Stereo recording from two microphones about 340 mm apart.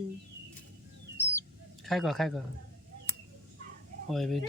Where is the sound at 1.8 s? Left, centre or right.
Centre.